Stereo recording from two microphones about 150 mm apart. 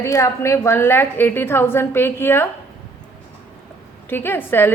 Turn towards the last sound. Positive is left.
turn(degrees=15)  # may be behind; listen again after turning